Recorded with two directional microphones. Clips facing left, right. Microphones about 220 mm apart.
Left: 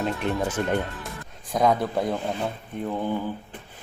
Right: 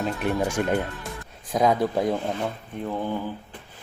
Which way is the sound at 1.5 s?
Centre (ahead or behind).